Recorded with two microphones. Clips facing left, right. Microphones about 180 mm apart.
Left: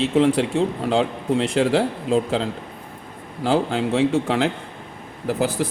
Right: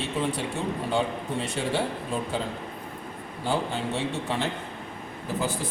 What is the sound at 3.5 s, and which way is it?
Speech, 90° left.